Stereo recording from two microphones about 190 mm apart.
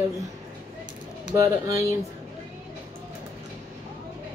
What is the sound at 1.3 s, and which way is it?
Speech, 15° right (ahead or behind).